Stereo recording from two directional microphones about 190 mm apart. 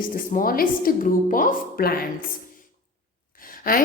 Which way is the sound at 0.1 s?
45° left (ahead or behind).